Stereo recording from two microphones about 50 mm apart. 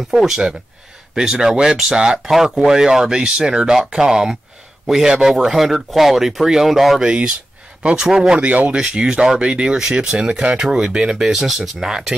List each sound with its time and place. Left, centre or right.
0.1 s speech: centre
7.1 s speech: centre
8.5 s speech: right
8.7 s speech: centre